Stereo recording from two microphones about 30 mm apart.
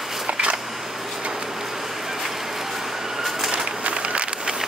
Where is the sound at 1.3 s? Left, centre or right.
Centre.